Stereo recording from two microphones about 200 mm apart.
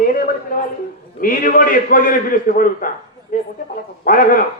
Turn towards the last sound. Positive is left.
turn(degrees=45)  # may be behind; listen again after turning